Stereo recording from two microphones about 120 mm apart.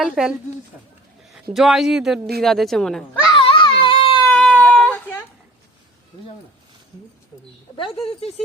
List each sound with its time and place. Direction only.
0.0 s a woman's voice: 5° right (ahead or behind)
1.5 s a woman's voice: 5° right (ahead or behind)
3.3 s baby cry: 45° left (ahead or behind)
4.3 s a sound: 10° left (ahead or behind)
7.8 s speech: 50° left (ahead or behind)